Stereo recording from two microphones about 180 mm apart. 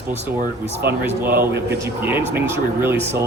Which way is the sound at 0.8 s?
65° right (ahead or behind).